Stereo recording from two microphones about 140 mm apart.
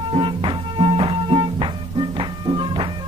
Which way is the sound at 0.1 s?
35° right (ahead or behind).